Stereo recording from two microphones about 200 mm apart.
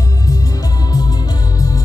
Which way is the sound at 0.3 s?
20° left (ahead or behind).